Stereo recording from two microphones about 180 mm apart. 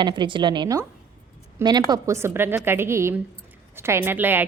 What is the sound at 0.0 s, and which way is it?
A woman's voice, 25° right (ahead or behind).